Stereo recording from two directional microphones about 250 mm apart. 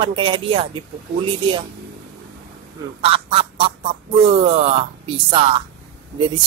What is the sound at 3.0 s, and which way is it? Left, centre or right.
A woman's voice, right.